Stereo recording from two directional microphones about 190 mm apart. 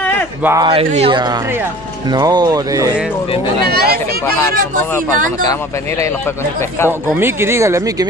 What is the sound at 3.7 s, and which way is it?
Speech, 55° right (ahead or behind).